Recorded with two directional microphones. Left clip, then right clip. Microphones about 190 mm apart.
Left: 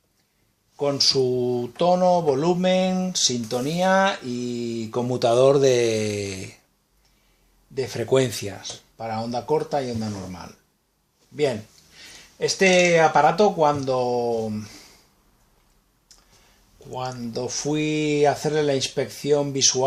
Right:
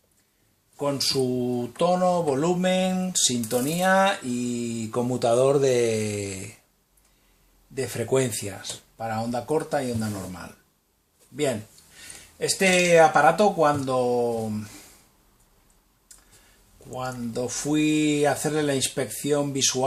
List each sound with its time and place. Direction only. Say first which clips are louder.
0.8 s speech: left 4 dB; 25° left (ahead or behind)
7.8 s speech: left 3 dB; 25° left (ahead or behind)
11.9 s speech: left 2 dB; 25° left (ahead or behind)
16.9 s speech: left 1 dB; 25° left (ahead or behind)